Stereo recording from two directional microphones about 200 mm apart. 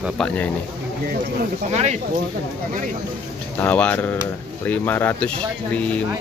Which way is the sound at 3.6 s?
10° left (ahead or behind).